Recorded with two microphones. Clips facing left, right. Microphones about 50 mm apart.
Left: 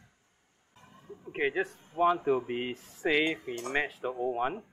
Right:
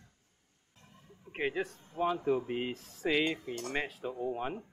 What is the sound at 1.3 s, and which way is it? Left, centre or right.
Speech, left.